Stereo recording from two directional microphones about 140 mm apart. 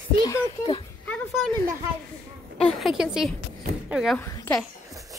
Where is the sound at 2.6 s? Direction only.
Centre (ahead or behind).